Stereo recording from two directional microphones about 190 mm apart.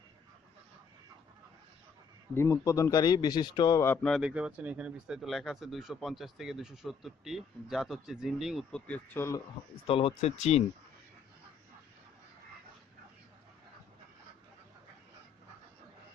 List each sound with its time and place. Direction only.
2.3 s speech: 15° left (ahead or behind)
9.8 s speech: 30° left (ahead or behind)